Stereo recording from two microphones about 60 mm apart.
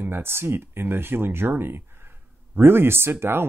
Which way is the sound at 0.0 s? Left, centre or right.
Right.